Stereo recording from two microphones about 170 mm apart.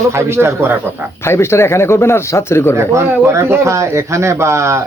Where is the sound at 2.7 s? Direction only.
15° right (ahead or behind).